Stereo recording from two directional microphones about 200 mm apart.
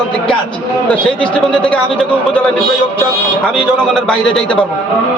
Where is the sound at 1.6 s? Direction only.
5° left (ahead or behind).